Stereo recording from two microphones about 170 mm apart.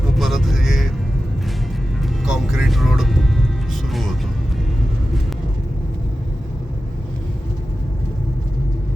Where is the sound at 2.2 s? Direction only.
Centre (ahead or behind).